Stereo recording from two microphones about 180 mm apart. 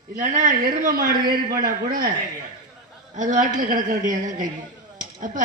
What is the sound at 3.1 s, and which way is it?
A man's voice, 45° right (ahead or behind).